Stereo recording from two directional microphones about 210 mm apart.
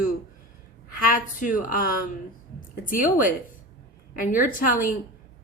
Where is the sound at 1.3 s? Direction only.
40° left (ahead or behind).